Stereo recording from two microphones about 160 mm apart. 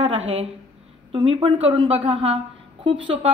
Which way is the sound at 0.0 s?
40° right (ahead or behind).